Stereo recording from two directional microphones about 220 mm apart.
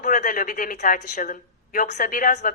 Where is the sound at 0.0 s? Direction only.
35° left (ahead or behind).